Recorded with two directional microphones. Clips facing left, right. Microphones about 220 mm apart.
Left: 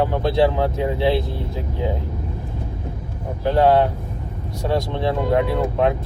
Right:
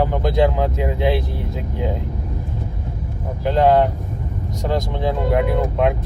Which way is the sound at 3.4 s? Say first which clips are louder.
Right 1 dB; 20° right (ahead or behind).